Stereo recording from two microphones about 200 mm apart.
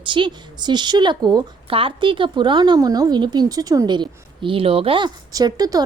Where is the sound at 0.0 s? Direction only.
25° right (ahead or behind).